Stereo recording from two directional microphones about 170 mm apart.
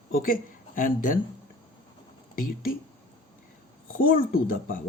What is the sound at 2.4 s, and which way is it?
Speech, 55° left (ahead or behind).